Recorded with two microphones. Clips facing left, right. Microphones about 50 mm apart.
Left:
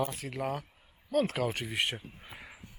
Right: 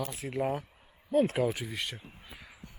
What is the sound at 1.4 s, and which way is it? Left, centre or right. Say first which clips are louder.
Speech: right 3 dB; left.